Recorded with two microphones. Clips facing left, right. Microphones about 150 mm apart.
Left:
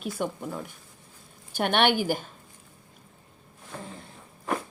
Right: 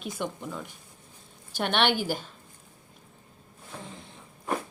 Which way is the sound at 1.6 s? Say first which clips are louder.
Left 2 dB; 50° left (ahead or behind).